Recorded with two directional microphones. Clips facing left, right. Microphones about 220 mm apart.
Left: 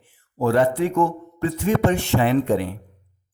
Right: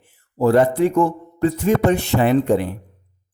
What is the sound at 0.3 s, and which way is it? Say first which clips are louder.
Speech: right 4 dB; 40° right (ahead or behind).